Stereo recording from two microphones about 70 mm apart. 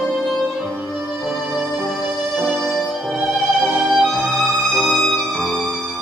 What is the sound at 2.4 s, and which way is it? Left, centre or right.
Music, right.